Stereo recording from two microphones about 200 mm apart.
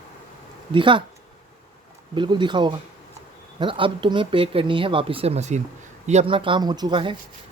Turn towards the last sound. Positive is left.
turn(degrees=-25)  # may be behind; listen again after turning